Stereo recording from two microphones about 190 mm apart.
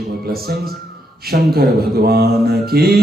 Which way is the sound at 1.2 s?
55° right (ahead or behind).